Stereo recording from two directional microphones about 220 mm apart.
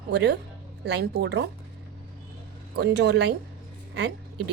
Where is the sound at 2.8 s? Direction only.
50° right (ahead or behind).